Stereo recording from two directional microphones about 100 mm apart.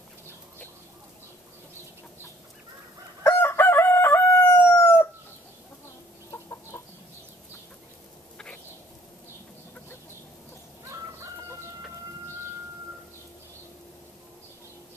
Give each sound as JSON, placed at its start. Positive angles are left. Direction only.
{"t": 3.3, "sound": "crowing", "side_deg": 25}
{"t": 6.3, "sound": "chicken", "side_deg": 25}